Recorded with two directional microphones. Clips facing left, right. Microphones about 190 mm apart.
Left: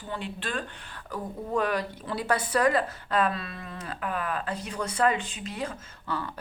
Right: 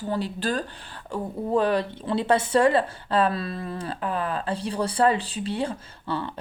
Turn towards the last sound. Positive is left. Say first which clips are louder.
# right 4 dB
turn(degrees=-30)  # may be behind; listen again after turning